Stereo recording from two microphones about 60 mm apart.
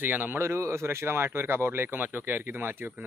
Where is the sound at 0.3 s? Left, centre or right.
Right.